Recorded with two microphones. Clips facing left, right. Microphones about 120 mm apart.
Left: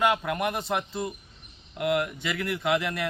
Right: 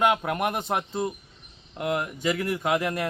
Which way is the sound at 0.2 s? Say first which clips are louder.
Right 1 dB; 40° right (ahead or behind).